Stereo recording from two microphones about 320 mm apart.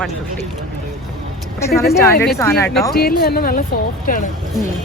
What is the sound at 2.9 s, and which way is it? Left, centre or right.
Speech, left.